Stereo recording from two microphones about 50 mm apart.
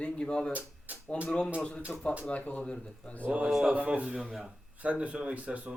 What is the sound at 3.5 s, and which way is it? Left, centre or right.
Speech, centre.